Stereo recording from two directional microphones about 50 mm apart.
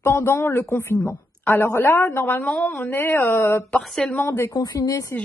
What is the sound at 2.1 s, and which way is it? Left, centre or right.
Speech, left.